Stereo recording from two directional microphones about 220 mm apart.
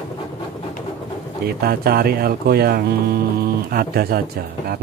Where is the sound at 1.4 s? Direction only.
45° right (ahead or behind).